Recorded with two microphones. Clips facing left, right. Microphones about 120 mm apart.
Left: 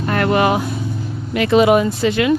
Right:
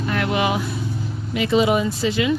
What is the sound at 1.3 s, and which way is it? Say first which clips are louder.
Speech: left 5 dB; 60° left (ahead or behind).